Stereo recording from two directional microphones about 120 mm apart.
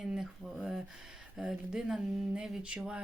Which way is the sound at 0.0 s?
5° right (ahead or behind).